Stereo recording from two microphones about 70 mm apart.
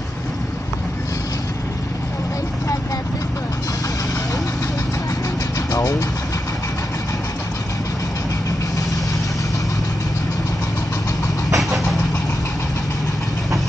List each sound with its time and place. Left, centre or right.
5.7 s vehicle: left
11.5 s vehicle: centre